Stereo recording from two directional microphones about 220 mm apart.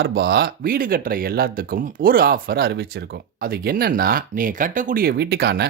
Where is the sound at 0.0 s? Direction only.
45° right (ahead or behind).